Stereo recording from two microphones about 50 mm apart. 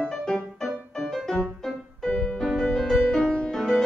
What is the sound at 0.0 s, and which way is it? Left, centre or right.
Music, centre.